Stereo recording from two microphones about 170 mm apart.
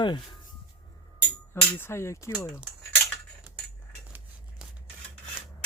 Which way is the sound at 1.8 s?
15° left (ahead or behind).